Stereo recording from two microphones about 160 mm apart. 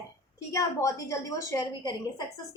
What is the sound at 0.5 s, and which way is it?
A woman's voice, 20° left (ahead or behind).